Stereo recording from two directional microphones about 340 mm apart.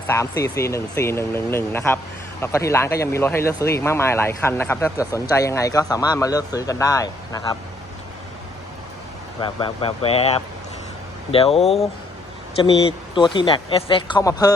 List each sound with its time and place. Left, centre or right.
0.1 s speech: centre
9.4 s speech: centre
11.6 s speech: centre
13.1 s speech: centre